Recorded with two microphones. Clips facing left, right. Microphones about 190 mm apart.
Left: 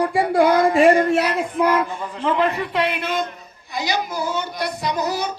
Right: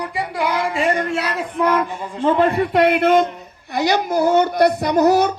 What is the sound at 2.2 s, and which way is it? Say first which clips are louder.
A man's voice: right 5 dB; 45° right (ahead or behind).